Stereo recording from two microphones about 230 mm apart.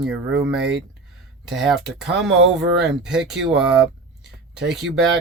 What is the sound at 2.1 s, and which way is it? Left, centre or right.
Speech, right.